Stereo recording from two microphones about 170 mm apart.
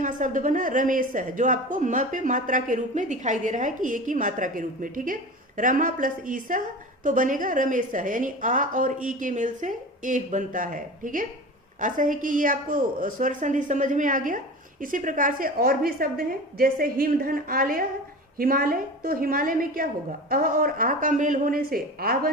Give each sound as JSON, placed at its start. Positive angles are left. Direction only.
{"t": 0.0, "sound": "a woman's voice", "side_deg": -50}